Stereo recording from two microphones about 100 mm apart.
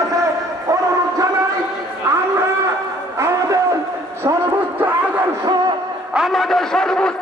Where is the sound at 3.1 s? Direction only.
30° right (ahead or behind).